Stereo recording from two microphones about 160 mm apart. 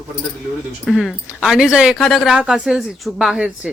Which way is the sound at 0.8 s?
Centre (ahead or behind).